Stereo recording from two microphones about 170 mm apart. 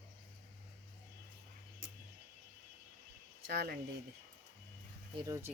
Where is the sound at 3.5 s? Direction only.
65° right (ahead or behind).